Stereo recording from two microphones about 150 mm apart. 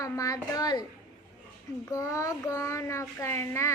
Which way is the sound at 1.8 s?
20° left (ahead or behind).